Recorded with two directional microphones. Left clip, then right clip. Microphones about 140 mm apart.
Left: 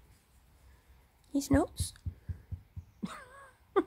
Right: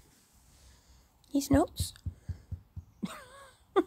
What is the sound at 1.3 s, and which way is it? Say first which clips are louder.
Speech: right 2 dB; 10° right (ahead or behind).